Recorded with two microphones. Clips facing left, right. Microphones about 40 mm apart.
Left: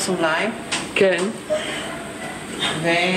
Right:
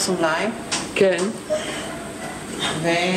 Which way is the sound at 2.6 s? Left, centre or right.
Left.